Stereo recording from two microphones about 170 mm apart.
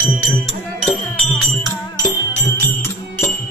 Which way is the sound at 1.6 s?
25° left (ahead or behind).